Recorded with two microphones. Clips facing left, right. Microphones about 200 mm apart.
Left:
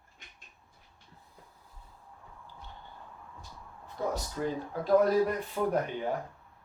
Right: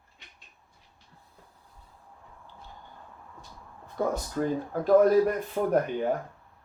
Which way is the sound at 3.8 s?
50° right (ahead or behind).